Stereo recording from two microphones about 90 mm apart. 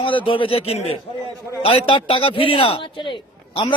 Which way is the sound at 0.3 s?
70° left (ahead or behind).